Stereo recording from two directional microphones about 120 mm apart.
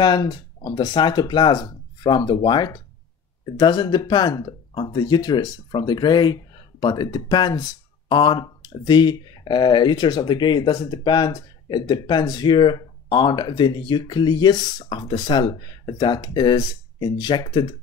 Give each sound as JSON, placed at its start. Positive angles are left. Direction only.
{"t": 0.0, "sound": "speech", "side_deg": 40}